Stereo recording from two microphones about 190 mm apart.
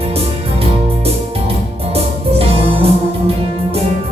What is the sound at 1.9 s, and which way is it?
Music, 30° right (ahead or behind).